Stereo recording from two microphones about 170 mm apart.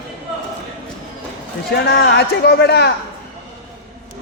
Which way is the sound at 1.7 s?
70° left (ahead or behind).